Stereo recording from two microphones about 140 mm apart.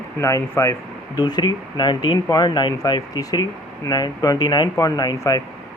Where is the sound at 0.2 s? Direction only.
20° left (ahead or behind).